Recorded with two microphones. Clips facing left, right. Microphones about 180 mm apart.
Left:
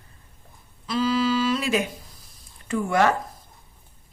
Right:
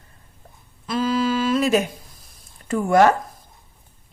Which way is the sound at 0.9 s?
50° right (ahead or behind).